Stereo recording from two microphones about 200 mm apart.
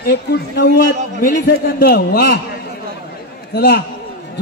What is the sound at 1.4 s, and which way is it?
Speech, 55° left (ahead or behind).